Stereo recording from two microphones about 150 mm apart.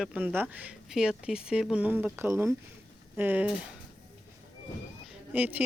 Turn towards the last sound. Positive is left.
turn(degrees=-10)  # may be behind; listen again after turning